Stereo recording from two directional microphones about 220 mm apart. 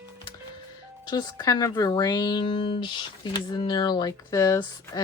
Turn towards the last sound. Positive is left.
turn(degrees=15)  # may be behind; listen again after turning